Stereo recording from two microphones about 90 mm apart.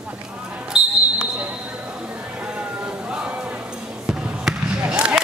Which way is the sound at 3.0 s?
10° right (ahead or behind).